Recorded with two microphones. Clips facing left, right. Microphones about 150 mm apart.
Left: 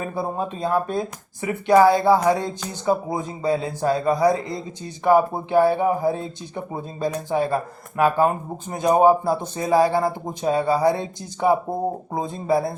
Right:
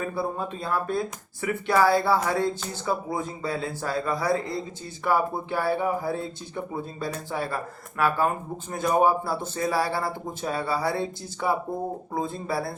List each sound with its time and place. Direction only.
0.2 s speech: 20° left (ahead or behind)